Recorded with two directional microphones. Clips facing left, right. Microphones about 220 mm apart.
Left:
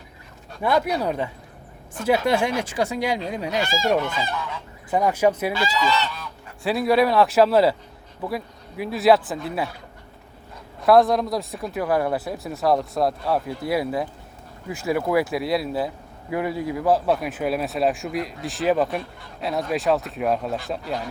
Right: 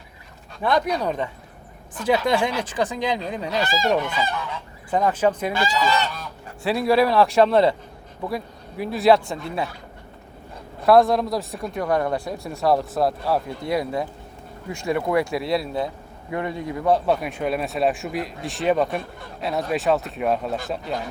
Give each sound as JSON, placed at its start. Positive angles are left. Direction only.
{"t": 0.6, "sound": "speech", "side_deg": 10}
{"t": 4.9, "sound": "speech", "side_deg": 10}
{"t": 5.8, "sound": "goose", "side_deg": -50}
{"t": 6.6, "sound": "speech", "side_deg": 0}
{"t": 8.8, "sound": "speech", "side_deg": 0}
{"t": 10.8, "sound": "speech", "side_deg": 0}